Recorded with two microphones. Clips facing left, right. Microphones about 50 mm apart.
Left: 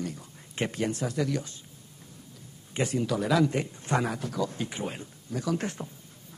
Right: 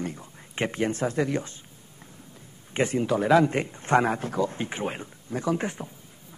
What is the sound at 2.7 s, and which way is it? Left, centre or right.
A man's voice, right.